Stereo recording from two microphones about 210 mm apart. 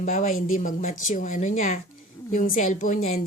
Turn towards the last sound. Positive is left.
turn(degrees=35)  # may be behind; listen again after turning